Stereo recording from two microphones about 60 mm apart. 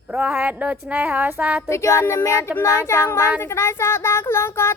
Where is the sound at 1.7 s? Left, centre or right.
Left.